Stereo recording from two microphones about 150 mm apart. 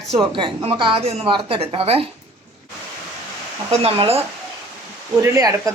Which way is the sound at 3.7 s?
40° right (ahead or behind).